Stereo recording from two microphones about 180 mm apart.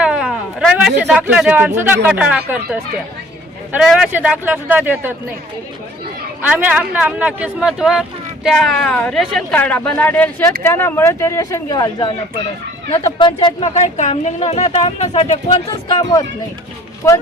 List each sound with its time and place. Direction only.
0.0 s speech: 5° right (ahead or behind)
6.5 s a woman's voice: 10° right (ahead or behind); by 13.7 s 25° left (ahead or behind)
13.7 s speech: 40° left (ahead or behind)
17.0 s a woman's voice: 15° left (ahead or behind)